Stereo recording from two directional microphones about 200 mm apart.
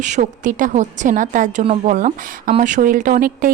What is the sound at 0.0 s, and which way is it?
Speech, 40° right (ahead or behind).